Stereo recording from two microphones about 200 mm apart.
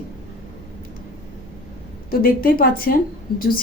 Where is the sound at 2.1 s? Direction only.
45° left (ahead or behind).